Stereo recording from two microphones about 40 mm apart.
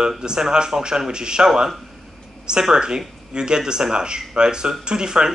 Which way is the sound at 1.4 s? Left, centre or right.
Centre.